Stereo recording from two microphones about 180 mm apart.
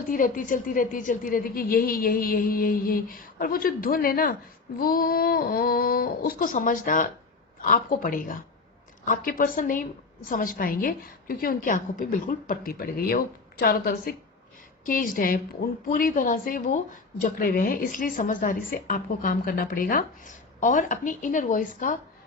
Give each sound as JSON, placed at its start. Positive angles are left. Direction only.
{"t": 0.1, "sound": "speech", "side_deg": 50}